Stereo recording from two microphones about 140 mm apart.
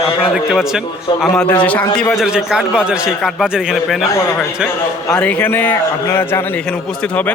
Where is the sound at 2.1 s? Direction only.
Centre (ahead or behind).